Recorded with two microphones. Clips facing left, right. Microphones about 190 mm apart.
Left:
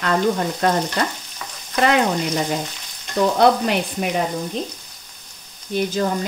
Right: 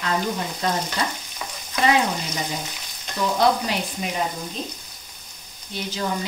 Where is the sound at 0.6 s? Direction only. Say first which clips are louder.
Left 6 dB; 65° left (ahead or behind).